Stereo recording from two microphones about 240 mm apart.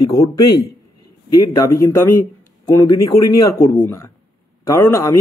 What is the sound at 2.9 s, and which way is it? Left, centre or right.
Speech, left.